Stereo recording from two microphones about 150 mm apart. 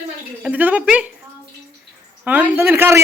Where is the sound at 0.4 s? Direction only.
10° right (ahead or behind).